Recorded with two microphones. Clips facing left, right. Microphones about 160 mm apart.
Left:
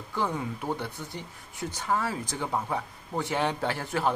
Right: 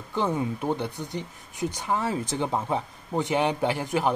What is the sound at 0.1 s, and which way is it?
Speech, 20° right (ahead or behind).